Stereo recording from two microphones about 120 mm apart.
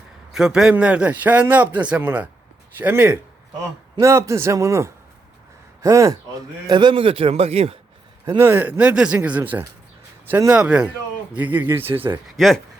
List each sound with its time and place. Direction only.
0.3 s a man's voice: 5° right (ahead or behind)
4.0 s a man's voice: 25° right (ahead or behind)
6.7 s a man's voice: 40° right (ahead or behind); by 7.8 s 55° right (ahead or behind)
8.4 s a man's voice: 15° right (ahead or behind)
12.4 s speech: centre (ahead or behind)